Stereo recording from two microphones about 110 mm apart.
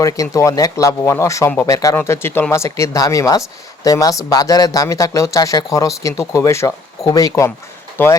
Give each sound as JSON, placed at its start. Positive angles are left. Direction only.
{"t": 0.0, "sound": "speech", "side_deg": 30}
{"t": 8.0, "sound": "speech", "side_deg": 20}